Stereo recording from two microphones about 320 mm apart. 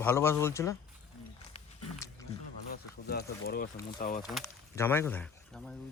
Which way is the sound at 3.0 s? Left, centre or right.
Left.